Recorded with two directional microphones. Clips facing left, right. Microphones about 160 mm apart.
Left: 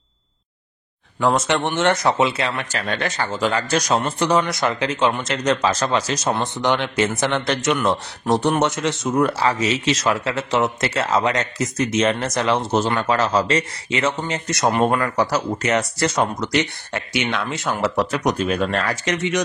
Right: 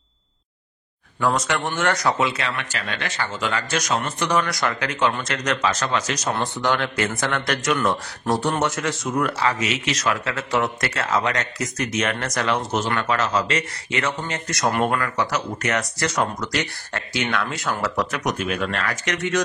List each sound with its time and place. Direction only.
1.2 s speech: 25° left (ahead or behind)